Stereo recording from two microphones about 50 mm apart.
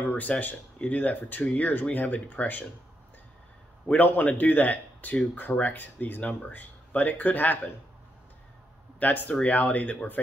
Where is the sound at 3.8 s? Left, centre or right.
Left.